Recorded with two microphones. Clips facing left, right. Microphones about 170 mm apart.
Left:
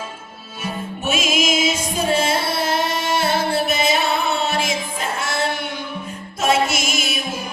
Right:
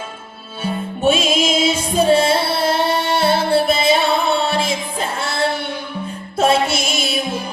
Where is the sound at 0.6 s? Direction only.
30° right (ahead or behind).